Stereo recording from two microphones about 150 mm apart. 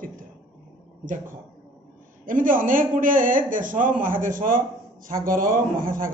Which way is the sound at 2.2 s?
65° right (ahead or behind).